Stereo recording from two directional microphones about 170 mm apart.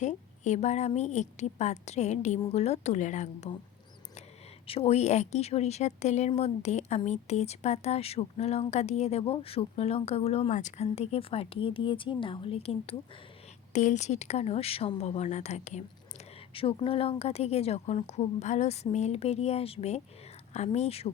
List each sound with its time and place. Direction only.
0.0 s a woman's voice: 45° left (ahead or behind)
4.6 s speech: 35° left (ahead or behind)